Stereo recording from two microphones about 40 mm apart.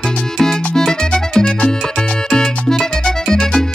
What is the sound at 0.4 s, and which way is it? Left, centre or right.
Music, centre.